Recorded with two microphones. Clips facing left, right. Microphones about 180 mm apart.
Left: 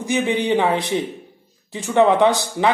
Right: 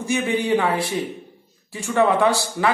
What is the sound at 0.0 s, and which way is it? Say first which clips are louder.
A man's voice: left 2 dB; 15° left (ahead or behind).